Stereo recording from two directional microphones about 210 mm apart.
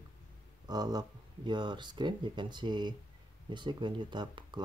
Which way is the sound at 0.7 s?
20° right (ahead or behind).